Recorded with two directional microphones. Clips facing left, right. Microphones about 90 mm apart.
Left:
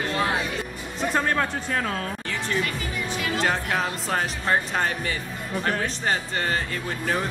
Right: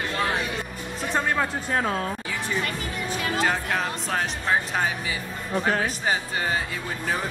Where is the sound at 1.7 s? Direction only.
25° right (ahead or behind).